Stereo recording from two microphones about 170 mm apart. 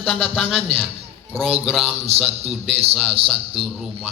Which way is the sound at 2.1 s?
35° right (ahead or behind).